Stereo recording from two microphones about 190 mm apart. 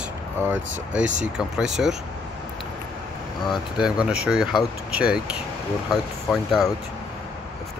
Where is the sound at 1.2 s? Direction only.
5° right (ahead or behind).